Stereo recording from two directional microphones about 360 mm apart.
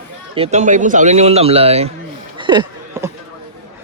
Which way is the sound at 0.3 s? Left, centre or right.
Centre.